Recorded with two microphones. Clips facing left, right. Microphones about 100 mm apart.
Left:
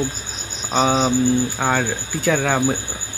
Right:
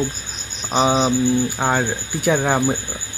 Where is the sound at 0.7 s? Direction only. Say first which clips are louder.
Right 1 dB; 10° right (ahead or behind).